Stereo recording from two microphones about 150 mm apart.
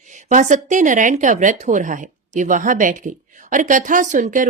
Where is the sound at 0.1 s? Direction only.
60° right (ahead or behind).